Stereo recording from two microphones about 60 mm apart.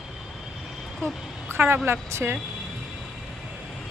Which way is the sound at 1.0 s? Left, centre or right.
Right.